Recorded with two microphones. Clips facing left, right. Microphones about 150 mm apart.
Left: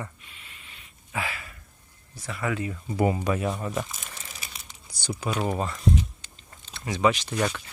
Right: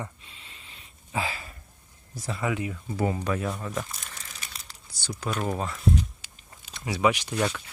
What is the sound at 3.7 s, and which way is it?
Crumpling, centre (ahead or behind).